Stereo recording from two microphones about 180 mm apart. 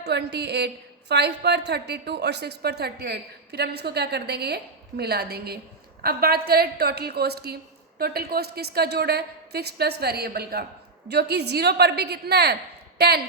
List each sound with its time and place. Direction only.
0.0 s a woman's voice: 70° right (ahead or behind)